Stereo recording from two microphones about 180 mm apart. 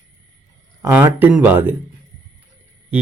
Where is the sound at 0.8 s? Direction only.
15° right (ahead or behind).